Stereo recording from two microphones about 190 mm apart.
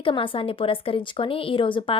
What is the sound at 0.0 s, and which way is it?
A woman's voice, 25° left (ahead or behind).